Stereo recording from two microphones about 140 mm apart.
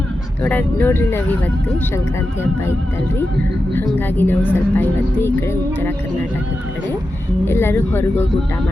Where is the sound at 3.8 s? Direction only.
15° left (ahead or behind).